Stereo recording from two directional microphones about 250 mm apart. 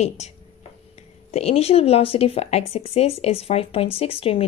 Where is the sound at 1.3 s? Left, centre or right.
Left.